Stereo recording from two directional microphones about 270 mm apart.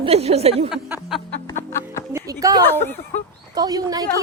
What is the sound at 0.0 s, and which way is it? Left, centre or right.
Speech, right.